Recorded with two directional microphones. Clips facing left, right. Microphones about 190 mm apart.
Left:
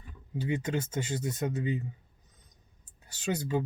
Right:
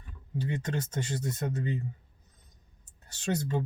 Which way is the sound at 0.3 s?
10° left (ahead or behind).